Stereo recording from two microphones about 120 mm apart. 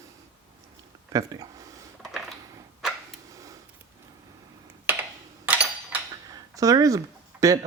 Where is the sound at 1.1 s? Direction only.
30° right (ahead or behind).